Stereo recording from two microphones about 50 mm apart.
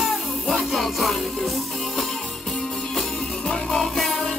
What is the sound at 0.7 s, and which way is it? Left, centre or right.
Music, centre.